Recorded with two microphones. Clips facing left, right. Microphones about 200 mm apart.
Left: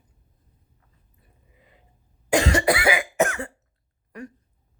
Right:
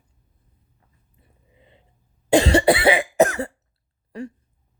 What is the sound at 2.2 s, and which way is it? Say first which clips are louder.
Cough: right 5 dB; 30° right (ahead or behind).